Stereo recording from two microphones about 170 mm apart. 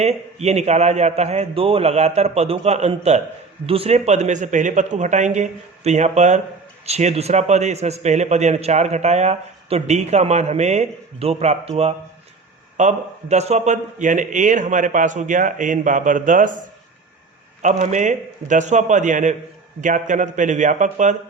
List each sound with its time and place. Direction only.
0.0 s a man's voice: 40° right (ahead or behind)
12.7 s a man's voice: 45° right (ahead or behind)
17.6 s a man's voice: 45° right (ahead or behind)